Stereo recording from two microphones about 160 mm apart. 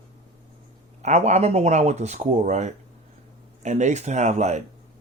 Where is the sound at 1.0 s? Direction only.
45° right (ahead or behind).